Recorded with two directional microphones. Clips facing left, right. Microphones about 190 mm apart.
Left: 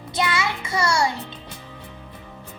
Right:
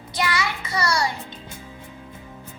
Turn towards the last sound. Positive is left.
turn(degrees=25)  # may be behind; listen again after turning